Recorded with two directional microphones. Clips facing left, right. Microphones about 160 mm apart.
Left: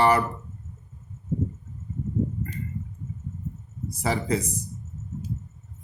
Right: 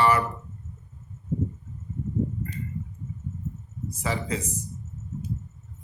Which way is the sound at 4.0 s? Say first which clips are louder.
Left 4 dB; 40° left (ahead or behind).